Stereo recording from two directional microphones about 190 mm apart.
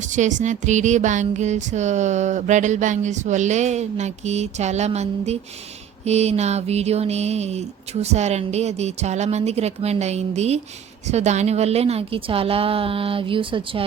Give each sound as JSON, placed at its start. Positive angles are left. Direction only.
{"t": 0.0, "sound": "music", "side_deg": -40}
{"t": 11.0, "sound": "a woman's voice", "side_deg": -35}